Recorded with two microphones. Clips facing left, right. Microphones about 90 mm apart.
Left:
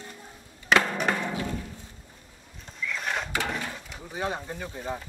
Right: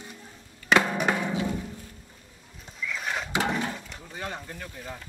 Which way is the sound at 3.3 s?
20° right (ahead or behind).